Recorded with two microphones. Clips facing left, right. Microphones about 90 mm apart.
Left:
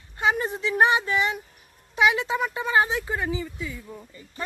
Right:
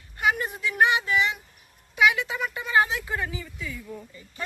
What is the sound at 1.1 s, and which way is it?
Speech, 40° left (ahead or behind).